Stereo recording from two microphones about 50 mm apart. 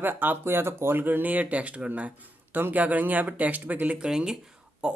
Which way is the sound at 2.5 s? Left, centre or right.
Right.